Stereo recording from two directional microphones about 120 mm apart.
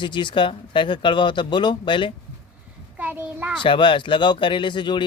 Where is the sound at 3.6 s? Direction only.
45° left (ahead or behind).